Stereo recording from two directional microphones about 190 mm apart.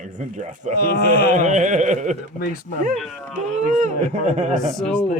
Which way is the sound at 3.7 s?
40° right (ahead or behind).